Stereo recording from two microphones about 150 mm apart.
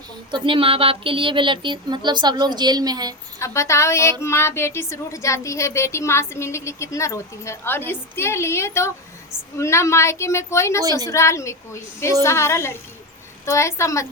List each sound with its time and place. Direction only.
0.3 s speech: 35° right (ahead or behind)
3.4 s a woman's voice: 20° left (ahead or behind)